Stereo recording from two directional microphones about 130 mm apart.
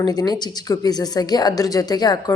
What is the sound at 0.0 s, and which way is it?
A woman's voice, 30° left (ahead or behind).